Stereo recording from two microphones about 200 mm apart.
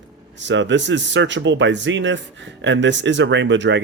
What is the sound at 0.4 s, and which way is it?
Speech, 65° right (ahead or behind).